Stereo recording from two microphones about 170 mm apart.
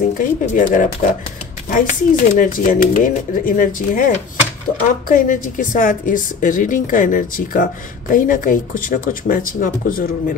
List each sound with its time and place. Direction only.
0.2 s a woman's voice: 50° left (ahead or behind)